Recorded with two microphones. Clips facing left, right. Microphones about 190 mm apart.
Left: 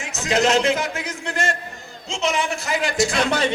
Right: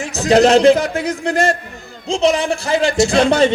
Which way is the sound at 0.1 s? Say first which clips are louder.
Right 8 dB; 35° right (ahead or behind).